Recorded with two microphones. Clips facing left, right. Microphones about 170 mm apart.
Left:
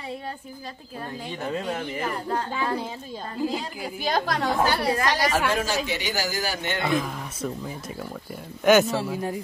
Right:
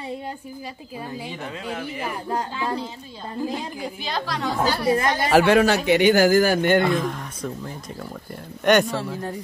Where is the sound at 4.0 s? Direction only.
50° left (ahead or behind).